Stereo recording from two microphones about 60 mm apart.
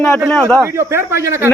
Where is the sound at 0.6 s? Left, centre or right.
Right.